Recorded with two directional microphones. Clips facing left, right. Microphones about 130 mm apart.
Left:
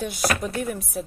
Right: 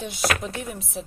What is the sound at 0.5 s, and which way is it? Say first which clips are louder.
Speech: left 5 dB; 50° left (ahead or behind).